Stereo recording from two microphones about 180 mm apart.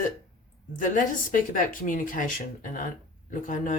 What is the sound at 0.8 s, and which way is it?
Speech, 45° left (ahead or behind).